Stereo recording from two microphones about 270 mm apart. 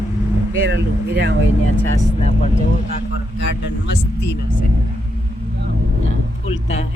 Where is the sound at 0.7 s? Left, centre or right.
Right.